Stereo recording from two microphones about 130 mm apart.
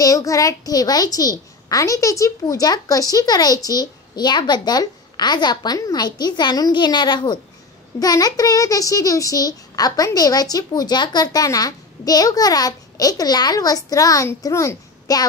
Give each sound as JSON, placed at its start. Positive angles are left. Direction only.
{"t": 0.0, "sound": "a child's voice", "side_deg": 25}